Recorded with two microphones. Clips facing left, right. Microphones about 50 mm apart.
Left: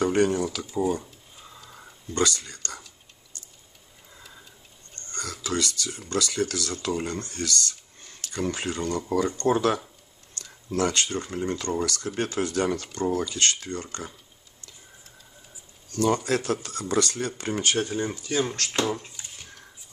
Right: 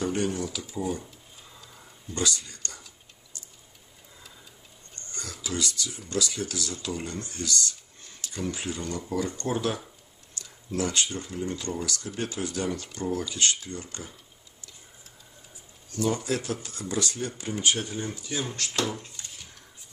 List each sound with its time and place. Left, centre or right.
0.0 s speech: left
2.1 s speech: left
5.1 s speech: left
15.9 s speech: left